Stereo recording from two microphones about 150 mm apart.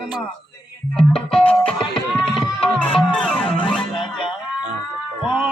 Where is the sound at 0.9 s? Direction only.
5° left (ahead or behind).